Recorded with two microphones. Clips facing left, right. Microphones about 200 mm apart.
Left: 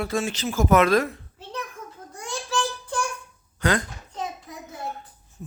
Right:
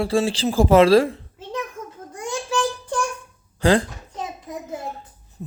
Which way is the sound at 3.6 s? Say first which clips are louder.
Right 6 dB; 30° right (ahead or behind).